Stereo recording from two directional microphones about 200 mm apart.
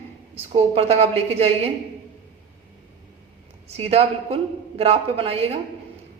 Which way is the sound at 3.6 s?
30° right (ahead or behind).